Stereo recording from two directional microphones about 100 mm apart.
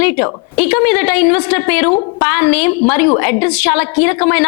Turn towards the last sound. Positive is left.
turn(degrees=25)  # may be behind; listen again after turning